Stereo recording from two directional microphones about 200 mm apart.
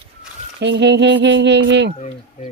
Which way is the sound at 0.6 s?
60° right (ahead or behind).